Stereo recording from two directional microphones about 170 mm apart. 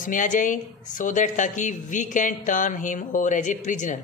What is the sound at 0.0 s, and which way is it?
Speech, 50° left (ahead or behind).